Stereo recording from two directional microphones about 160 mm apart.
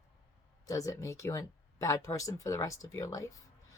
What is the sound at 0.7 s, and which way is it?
Speech, 20° left (ahead or behind).